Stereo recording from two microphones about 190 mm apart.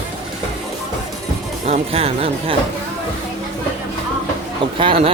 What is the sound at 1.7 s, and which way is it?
Speech, 30° right (ahead or behind).